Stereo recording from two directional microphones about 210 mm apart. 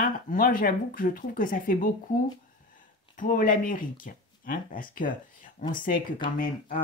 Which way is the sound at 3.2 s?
40° left (ahead or behind).